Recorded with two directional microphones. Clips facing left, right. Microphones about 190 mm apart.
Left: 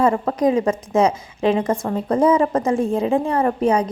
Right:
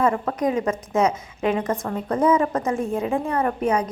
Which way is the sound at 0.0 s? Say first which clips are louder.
Left 4 dB; 30° left (ahead or behind).